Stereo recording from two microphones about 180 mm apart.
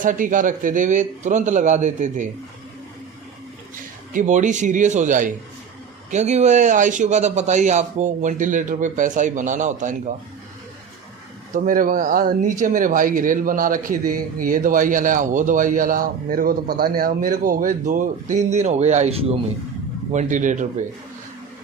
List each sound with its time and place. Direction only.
0.0 s speech: 45° right (ahead or behind)
4.1 s speech: 45° right (ahead or behind)
11.5 s speech: 45° right (ahead or behind)